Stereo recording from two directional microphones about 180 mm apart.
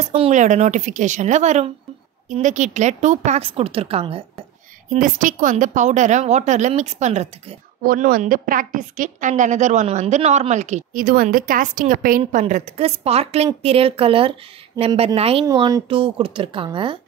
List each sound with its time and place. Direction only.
0.1 s a woman's voice: 40° right (ahead or behind)
4.8 s a woman's voice: 45° right (ahead or behind)
7.8 s a woman's voice: 55° right (ahead or behind); by 15.4 s 35° right (ahead or behind)
15.4 s a woman's voice: 20° right (ahead or behind)